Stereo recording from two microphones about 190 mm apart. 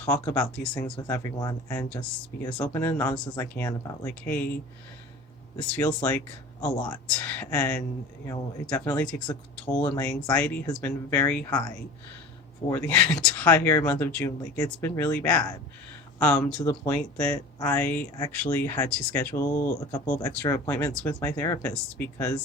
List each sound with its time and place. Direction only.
0.0 s speech: 20° left (ahead or behind)
5.5 s speech: 10° left (ahead or behind)
12.7 s speech: 10° left (ahead or behind)